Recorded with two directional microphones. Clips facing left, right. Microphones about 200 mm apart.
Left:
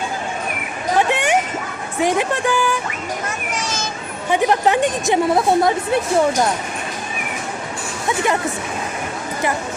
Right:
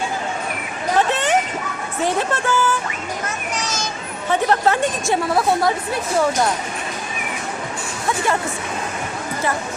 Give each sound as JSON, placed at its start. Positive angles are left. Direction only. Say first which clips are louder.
{"t": 0.9, "sound": "a sound", "louder": "left 1 dB", "side_deg": 15}
{"t": 2.0, "sound": "a woman's voice", "louder": "left 3 dB", "side_deg": 15}
{"t": 4.3, "sound": "a woman's voice", "louder": "left 1 dB", "side_deg": 15}